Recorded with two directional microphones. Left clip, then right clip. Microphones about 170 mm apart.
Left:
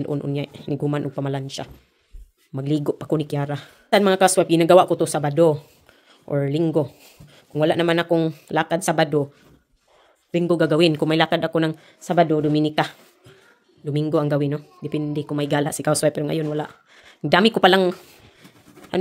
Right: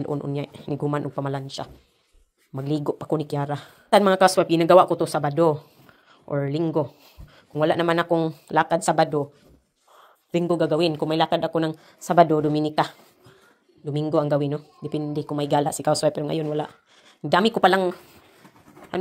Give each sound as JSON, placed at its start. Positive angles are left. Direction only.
{"t": 0.0, "sound": "speech", "side_deg": 20}
{"t": 10.3, "sound": "speech", "side_deg": 20}